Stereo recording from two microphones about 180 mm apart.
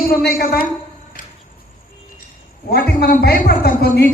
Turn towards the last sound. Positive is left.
turn(degrees=60)  # may be behind; listen again after turning